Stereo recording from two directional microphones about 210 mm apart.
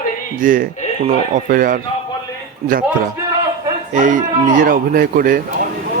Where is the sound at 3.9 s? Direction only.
40° right (ahead or behind).